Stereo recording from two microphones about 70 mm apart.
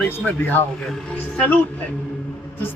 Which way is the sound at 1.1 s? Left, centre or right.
Centre.